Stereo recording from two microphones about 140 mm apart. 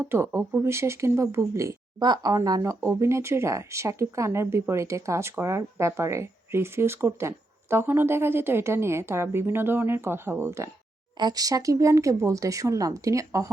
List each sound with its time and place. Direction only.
0.0 s speech: 15° right (ahead or behind)